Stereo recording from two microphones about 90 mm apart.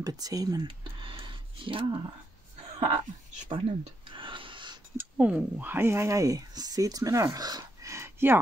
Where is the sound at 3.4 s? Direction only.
70° right (ahead or behind).